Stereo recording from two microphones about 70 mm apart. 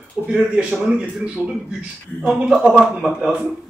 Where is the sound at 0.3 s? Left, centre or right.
Centre.